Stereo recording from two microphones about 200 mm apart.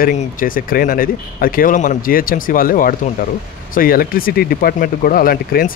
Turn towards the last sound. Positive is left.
turn(degrees=45)  # may be behind; listen again after turning